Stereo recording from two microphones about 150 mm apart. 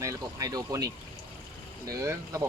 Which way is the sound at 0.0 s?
20° right (ahead or behind).